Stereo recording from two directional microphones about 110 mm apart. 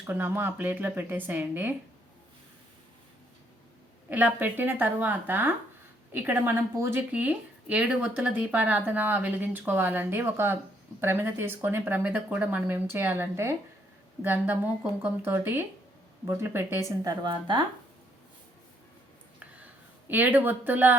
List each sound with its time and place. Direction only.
0.0 s speech: 20° right (ahead or behind)
4.1 s speech: 15° right (ahead or behind)
17.0 s a woman's voice: 40° right (ahead or behind)
20.1 s speech: 15° right (ahead or behind)